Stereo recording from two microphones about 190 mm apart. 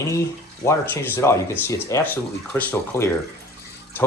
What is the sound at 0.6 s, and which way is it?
Speech, 15° left (ahead or behind).